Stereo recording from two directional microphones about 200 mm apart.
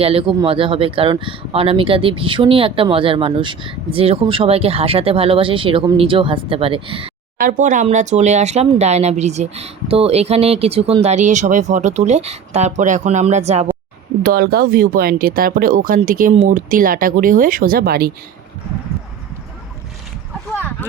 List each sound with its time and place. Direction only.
0.0 s speech: 30° right (ahead or behind)
7.3 s speech: 40° right (ahead or behind)
14.3 s speech: 50° right (ahead or behind)